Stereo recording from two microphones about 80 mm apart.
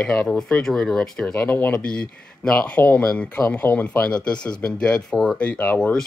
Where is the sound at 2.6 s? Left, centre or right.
Left.